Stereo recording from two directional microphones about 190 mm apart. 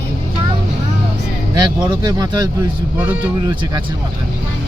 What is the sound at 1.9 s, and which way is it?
Speech, 20° right (ahead or behind).